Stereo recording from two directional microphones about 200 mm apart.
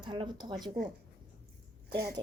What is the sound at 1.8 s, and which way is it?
Speech, 50° right (ahead or behind).